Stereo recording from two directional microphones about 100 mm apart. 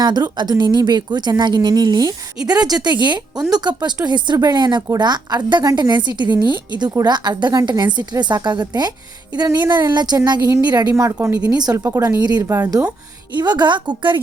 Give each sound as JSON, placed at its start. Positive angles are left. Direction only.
{"t": 0.0, "sound": "a woman's voice", "side_deg": -45}
{"t": 10.9, "sound": "a woman's voice", "side_deg": -25}
{"t": 11.4, "sound": "speech", "side_deg": -40}
{"t": 12.5, "sound": "a woman's voice", "side_deg": -30}
{"t": 13.3, "sound": "a woman's voice", "side_deg": -45}